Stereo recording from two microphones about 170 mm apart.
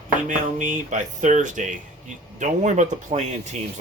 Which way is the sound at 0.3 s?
50° right (ahead or behind).